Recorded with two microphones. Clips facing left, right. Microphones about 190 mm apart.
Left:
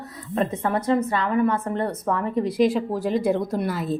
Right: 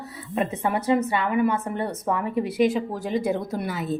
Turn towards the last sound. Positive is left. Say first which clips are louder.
# left 2 dB
turn(degrees=0)  # may be behind; listen again after turning